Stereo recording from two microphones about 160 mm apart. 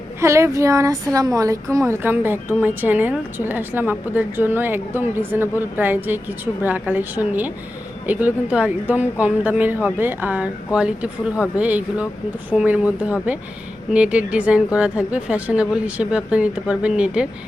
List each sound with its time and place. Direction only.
0.2 s a woman's voice: 15° right (ahead or behind)